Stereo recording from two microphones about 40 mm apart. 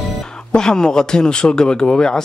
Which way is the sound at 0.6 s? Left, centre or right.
Centre.